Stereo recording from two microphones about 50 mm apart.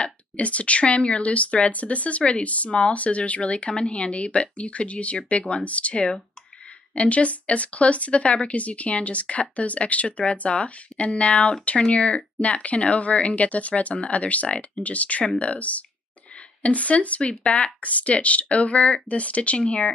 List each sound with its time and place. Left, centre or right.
0.0 s speech: left